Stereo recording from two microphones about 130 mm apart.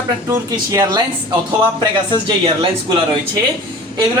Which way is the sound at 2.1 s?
40° right (ahead or behind).